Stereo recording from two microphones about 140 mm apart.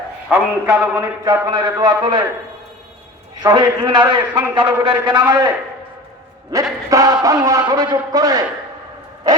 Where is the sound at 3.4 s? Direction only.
30° right (ahead or behind).